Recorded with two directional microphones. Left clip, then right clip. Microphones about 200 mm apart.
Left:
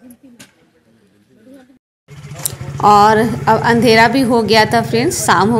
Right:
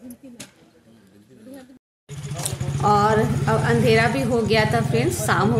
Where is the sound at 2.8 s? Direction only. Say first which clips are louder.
Left 9 dB; 40° left (ahead or behind).